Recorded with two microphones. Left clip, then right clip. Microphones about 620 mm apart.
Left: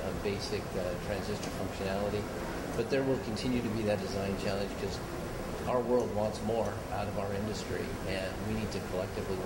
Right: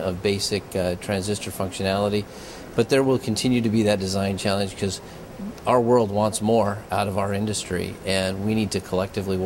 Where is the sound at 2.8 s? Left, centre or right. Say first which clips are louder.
Right 12 dB; right.